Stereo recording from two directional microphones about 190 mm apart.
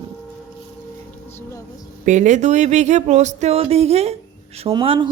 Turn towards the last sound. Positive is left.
turn(degrees=-25)  # may be behind; listen again after turning